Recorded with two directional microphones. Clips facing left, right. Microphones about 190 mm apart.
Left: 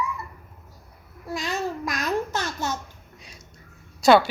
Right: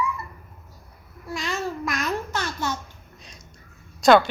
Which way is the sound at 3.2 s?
5° left (ahead or behind).